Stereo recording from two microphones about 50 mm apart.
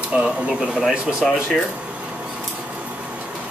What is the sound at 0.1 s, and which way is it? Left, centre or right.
Speech, right.